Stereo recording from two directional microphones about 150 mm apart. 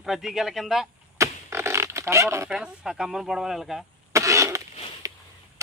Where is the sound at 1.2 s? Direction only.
20° right (ahead or behind).